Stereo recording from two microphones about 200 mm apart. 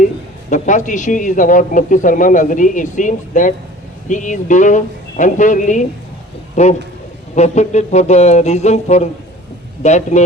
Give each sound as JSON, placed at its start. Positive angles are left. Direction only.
{"t": 0.5, "sound": "a man's voice", "side_deg": 40}